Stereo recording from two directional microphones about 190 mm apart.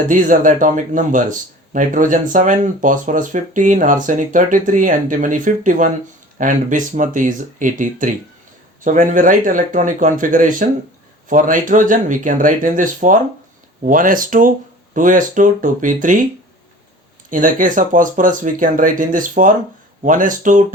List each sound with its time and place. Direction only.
0.1 s speech: 45° right (ahead or behind)
17.2 s speech: 45° right (ahead or behind)